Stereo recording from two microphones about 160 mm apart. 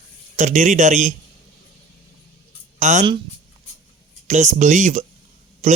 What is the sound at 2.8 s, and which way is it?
Speech, 50° right (ahead or behind).